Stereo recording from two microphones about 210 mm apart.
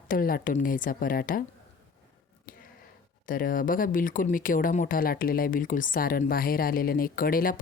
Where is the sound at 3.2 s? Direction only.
40° left (ahead or behind).